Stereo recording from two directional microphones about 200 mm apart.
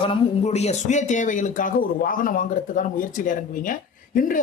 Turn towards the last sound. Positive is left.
turn(degrees=45)  # may be behind; listen again after turning